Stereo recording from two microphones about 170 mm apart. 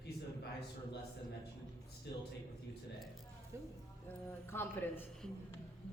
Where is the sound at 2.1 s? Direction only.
80° left.